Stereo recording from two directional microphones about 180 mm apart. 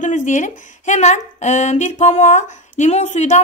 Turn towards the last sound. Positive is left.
turn(degrees=40)  # may be behind; listen again after turning